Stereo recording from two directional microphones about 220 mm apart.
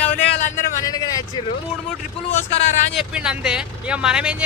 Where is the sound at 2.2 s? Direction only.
30° left (ahead or behind).